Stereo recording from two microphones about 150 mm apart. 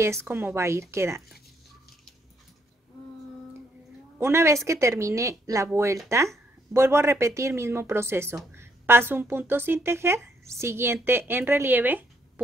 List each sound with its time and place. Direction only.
0.0 s a woman's voice: 15° right (ahead or behind)
4.2 s a woman's voice: 20° right (ahead or behind)